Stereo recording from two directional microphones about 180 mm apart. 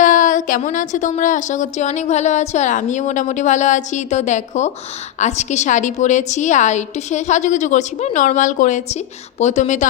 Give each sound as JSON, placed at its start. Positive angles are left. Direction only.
{"t": 0.0, "sound": "a woman's voice", "side_deg": 45}